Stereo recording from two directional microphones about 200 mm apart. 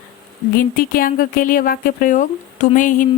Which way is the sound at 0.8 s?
45° left (ahead or behind).